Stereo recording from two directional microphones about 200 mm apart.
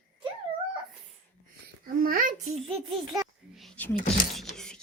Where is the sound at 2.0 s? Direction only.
45° right (ahead or behind).